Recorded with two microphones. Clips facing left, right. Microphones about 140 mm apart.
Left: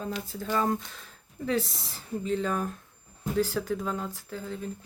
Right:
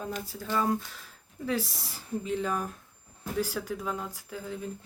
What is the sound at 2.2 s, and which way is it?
Speech, 10° right (ahead or behind).